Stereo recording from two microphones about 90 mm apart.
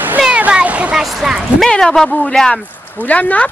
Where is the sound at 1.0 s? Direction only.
5° right (ahead or behind); by 2.3 s 15° left (ahead or behind).